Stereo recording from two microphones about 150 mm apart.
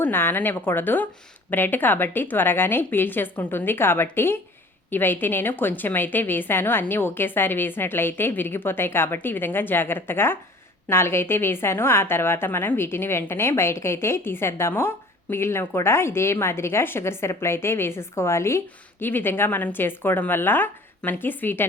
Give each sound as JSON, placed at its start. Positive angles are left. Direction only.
{"t": 0.0, "sound": "a woman's voice", "side_deg": 15}